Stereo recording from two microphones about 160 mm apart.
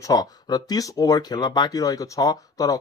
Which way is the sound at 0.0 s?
25° left (ahead or behind).